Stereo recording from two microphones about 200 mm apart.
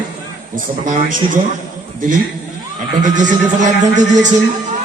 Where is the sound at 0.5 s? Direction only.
40° right (ahead or behind).